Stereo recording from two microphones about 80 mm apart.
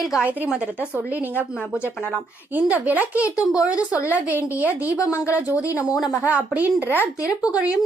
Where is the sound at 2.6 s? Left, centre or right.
Centre.